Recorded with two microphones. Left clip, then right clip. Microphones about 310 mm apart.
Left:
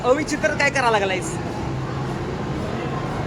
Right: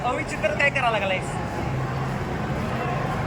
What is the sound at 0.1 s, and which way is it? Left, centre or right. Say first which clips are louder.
Speech: left 5 dB; centre.